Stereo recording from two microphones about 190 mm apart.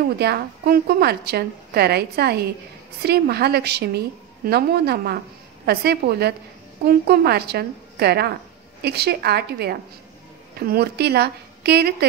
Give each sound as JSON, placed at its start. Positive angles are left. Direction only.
{"t": 0.2, "sound": "a woman's voice", "side_deg": -55}